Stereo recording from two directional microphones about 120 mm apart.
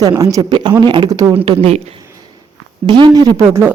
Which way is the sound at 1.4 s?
50° right (ahead or behind).